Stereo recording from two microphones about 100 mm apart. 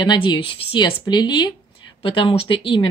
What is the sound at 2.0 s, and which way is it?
Speech, 60° left (ahead or behind).